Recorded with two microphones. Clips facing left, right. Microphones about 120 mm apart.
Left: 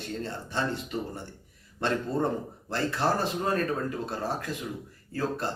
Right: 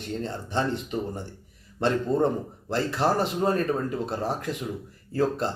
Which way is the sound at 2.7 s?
15° right (ahead or behind).